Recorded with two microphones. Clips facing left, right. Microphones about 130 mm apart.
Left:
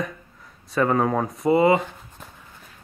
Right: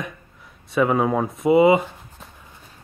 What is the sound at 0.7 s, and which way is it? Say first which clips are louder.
Speech: right 2 dB; 10° right (ahead or behind).